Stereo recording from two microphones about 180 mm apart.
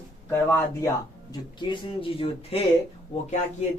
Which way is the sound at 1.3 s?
25° left (ahead or behind).